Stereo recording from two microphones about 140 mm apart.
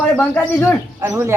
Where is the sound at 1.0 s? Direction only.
15° right (ahead or behind).